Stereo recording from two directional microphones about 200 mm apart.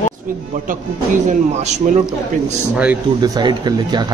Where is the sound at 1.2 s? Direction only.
35° right (ahead or behind).